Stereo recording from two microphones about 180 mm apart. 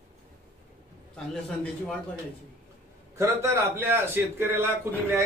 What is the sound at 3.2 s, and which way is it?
A man's voice, 15° right (ahead or behind).